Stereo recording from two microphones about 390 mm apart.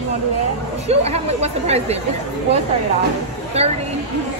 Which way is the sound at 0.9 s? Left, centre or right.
Centre.